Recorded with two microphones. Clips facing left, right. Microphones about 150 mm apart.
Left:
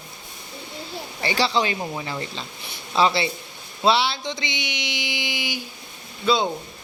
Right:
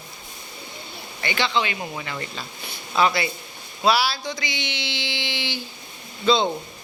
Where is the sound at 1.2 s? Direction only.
35° left (ahead or behind).